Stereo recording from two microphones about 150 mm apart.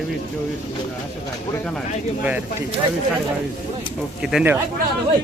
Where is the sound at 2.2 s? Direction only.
10° right (ahead or behind).